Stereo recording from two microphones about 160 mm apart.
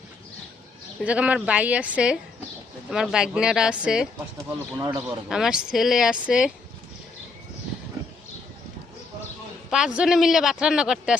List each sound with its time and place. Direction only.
1.0 s a man's voice: 10° right (ahead or behind)
4.4 s speech: 20° right (ahead or behind)
5.3 s a man's voice: 5° right (ahead or behind)
9.6 s a man's voice: 5° right (ahead or behind)